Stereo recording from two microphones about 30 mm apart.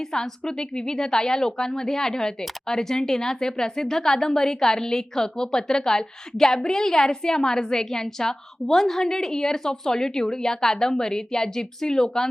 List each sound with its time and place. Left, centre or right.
0.1 s a woman's voice: left